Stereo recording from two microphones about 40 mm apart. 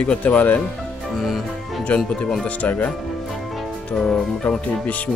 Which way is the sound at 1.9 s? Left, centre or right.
Left.